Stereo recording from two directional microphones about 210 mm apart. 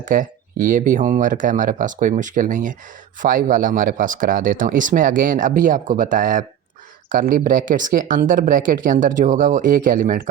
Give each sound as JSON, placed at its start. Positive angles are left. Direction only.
{"t": 0.0, "sound": "speech", "side_deg": -40}